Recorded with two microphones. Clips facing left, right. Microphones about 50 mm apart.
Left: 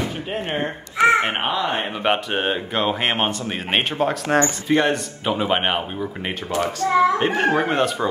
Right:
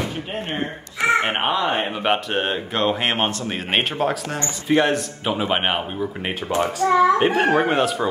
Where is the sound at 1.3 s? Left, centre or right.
Centre.